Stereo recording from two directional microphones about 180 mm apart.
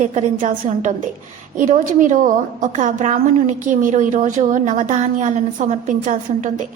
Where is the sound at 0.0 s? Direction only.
40° right (ahead or behind).